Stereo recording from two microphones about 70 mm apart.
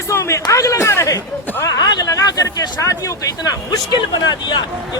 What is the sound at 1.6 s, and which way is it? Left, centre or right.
Speech, left.